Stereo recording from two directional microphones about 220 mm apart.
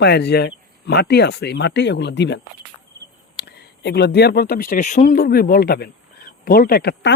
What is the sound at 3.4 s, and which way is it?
Speech, 50° left (ahead or behind).